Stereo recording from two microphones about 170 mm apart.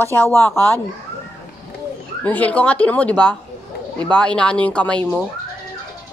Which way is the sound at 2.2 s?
10° left (ahead or behind).